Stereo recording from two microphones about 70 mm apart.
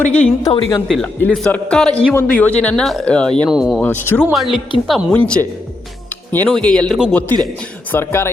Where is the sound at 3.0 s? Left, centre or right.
Centre.